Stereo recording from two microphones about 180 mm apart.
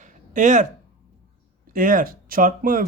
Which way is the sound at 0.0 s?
45° right (ahead or behind).